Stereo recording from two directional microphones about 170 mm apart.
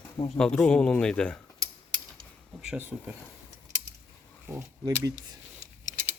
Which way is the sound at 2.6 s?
10° right (ahead or behind).